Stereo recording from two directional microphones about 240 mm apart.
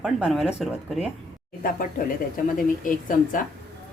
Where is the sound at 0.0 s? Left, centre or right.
Centre.